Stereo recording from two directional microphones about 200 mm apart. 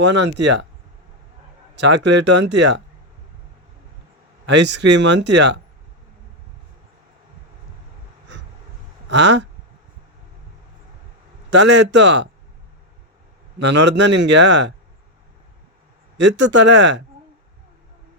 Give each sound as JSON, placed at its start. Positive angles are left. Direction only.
{"t": 0.0, "sound": "speech", "side_deg": -60}
{"t": 1.7, "sound": "speech", "side_deg": -60}
{"t": 4.4, "sound": "speech", "side_deg": -60}
{"t": 9.0, "sound": "speech", "side_deg": -60}
{"t": 11.5, "sound": "speech", "side_deg": -60}
{"t": 13.6, "sound": "speech", "side_deg": -60}
{"t": 16.1, "sound": "speech", "side_deg": -60}